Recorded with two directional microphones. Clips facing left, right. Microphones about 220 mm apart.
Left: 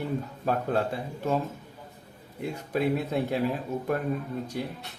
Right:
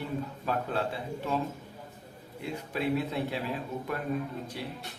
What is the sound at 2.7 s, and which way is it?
Speech, 45° left (ahead or behind).